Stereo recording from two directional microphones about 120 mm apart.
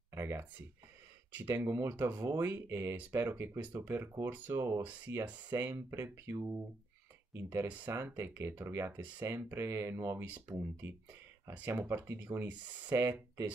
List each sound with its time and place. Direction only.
0.1 s speech: 20° right (ahead or behind)
1.5 s speech: 25° right (ahead or behind)